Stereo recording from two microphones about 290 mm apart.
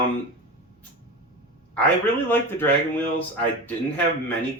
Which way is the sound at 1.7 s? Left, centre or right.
Centre.